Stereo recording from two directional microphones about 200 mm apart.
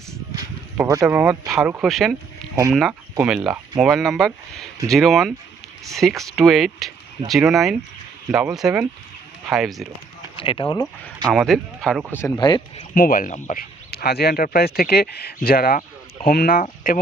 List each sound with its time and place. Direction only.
0.9 s speech: 15° right (ahead or behind)
10.3 s speech: 25° left (ahead or behind)
11.3 s speech: centre (ahead or behind)
12.2 s speech: 20° left (ahead or behind)
12.9 s speech: 45° left (ahead or behind)